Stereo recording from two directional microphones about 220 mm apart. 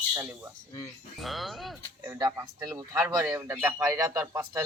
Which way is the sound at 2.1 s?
15° right (ahead or behind).